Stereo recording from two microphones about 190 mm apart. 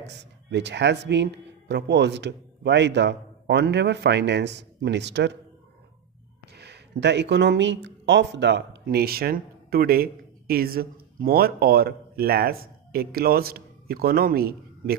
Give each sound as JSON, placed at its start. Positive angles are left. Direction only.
{"t": 0.0, "sound": "speech", "side_deg": -65}
{"t": 6.5, "sound": "speech", "side_deg": -60}